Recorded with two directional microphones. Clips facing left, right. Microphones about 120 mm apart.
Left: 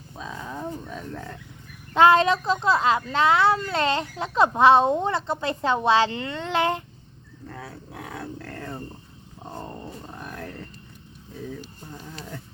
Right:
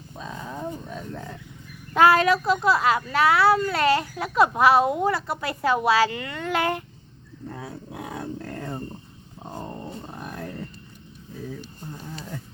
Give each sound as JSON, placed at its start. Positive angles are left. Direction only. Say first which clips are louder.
{"t": 0.2, "sound": "cattle", "louder": "even", "side_deg": 0}
{"t": 2.0, "sound": "a child's voice", "louder": "left 1 dB", "side_deg": 25}
{"t": 7.5, "sound": "dog", "louder": "right 2 dB", "side_deg": -15}
{"t": 9.4, "sound": "a sound", "louder": "right 1 dB", "side_deg": -10}